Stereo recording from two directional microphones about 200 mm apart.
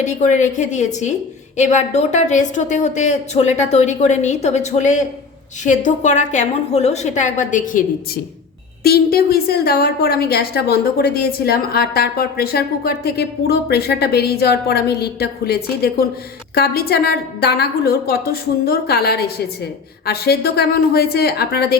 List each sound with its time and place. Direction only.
0.0 s a woman's voice: 35° left (ahead or behind); by 21.8 s 50° left (ahead or behind)